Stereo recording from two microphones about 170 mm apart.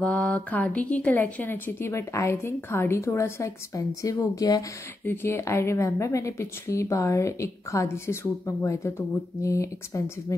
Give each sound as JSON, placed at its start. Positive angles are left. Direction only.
{"t": 0.0, "sound": "speech", "side_deg": 5}